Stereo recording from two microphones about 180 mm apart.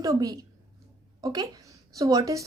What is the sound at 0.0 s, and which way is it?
A woman's voice, 20° right (ahead or behind).